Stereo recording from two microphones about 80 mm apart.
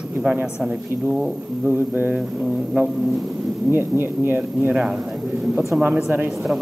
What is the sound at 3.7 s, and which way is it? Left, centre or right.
Speech, right.